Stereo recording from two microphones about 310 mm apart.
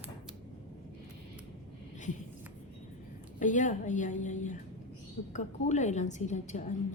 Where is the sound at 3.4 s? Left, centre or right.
Left.